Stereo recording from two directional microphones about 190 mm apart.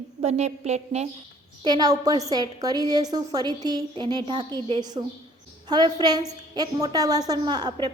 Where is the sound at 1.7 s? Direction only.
20° right (ahead or behind).